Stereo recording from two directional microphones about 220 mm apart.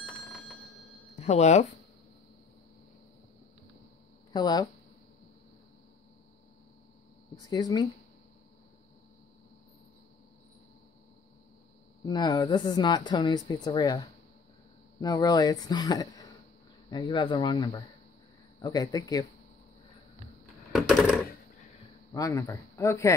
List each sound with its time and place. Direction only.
1.1 s speech: 30° left (ahead or behind)
4.3 s speech: 20° left (ahead or behind)
7.3 s speech: 15° left (ahead or behind)
12.0 s speech: 20° left (ahead or behind)
20.7 s coin: centre (ahead or behind)
22.1 s speech: 15° left (ahead or behind)